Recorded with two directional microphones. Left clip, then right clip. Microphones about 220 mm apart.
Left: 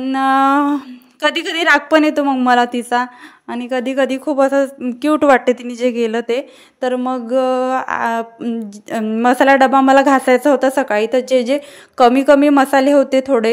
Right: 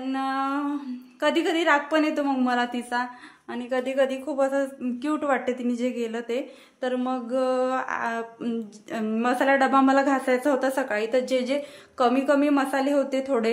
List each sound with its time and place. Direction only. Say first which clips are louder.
0.0 s a woman's voice: left 13 dB; 45° left (ahead or behind)